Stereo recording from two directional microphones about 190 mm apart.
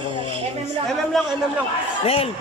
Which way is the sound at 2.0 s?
30° left (ahead or behind).